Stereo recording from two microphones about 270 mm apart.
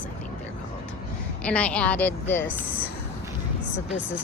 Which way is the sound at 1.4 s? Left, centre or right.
Centre.